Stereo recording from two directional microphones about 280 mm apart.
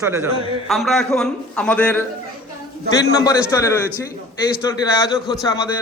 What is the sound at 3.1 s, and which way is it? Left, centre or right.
A man's voice, centre.